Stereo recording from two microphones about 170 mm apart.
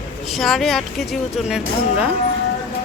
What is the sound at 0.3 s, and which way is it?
A woman's voice, centre (ahead or behind).